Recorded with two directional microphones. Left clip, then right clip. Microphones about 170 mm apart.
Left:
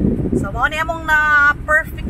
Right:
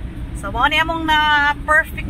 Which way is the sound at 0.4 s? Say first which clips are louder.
Right 5 dB; centre (ahead or behind).